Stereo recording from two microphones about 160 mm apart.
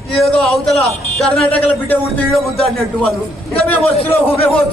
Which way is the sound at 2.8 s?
Centre (ahead or behind).